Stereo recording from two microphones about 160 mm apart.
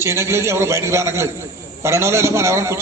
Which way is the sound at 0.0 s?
15° right (ahead or behind).